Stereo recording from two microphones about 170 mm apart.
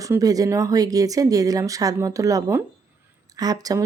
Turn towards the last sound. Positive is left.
turn(degrees=-20)  # may be behind; listen again after turning